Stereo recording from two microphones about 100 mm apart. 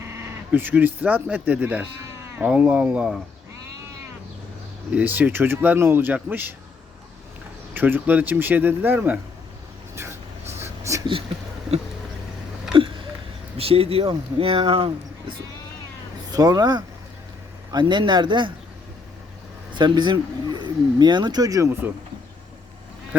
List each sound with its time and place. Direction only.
0.1 s speech: 20° right (ahead or behind)
4.9 s speech: 15° right (ahead or behind)
7.7 s speech: 20° right (ahead or behind)
10.6 s a sound: 30° right (ahead or behind)
12.7 s a sound: 60° right (ahead or behind)
13.6 s speech: 75° right (ahead or behind)
16.3 s speech: 40° right (ahead or behind)
19.7 s speech: 50° right (ahead or behind); by 21.9 s 25° right (ahead or behind)